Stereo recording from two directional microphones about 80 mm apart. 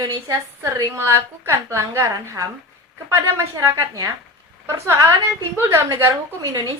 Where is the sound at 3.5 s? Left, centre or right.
Right.